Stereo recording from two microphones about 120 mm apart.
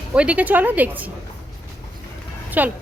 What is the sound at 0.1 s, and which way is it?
Speech, 10° right (ahead or behind).